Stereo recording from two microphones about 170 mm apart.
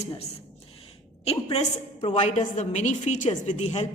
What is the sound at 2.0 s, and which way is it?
A woman's voice, 45° left (ahead or behind).